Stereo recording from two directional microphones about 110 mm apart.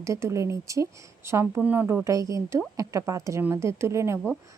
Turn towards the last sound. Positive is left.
turn(degrees=-25)  # may be behind; listen again after turning